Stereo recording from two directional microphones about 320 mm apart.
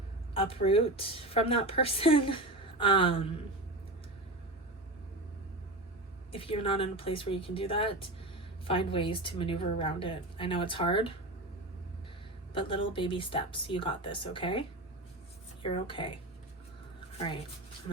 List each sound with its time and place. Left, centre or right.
0.3 s a woman's voice: centre
6.3 s a woman's voice: centre
12.5 s a woman's voice: centre
15.6 s a woman's voice: centre